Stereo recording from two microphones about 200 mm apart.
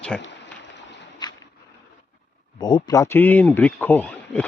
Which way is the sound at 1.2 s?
20° left (ahead or behind).